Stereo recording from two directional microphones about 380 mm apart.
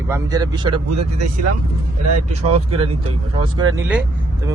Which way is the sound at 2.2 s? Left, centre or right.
Right.